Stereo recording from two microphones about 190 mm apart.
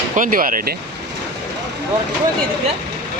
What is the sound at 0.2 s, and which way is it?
Speech, 45° right (ahead or behind).